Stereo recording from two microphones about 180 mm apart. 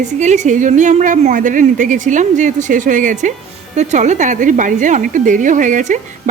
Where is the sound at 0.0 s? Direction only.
40° right (ahead or behind).